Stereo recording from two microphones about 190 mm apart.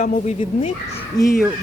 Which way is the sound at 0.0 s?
35° left (ahead or behind).